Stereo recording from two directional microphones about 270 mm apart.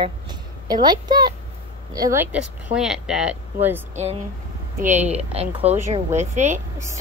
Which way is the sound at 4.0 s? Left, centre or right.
Right.